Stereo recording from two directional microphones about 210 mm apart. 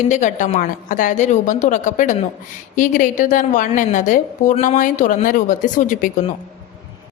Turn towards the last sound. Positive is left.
turn(degrees=40)  # may be behind; listen again after turning